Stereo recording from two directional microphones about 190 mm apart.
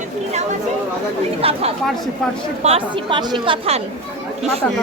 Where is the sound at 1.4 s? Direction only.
30° right (ahead or behind).